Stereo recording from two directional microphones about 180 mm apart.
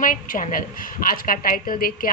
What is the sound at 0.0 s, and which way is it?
Speech, 50° left (ahead or behind).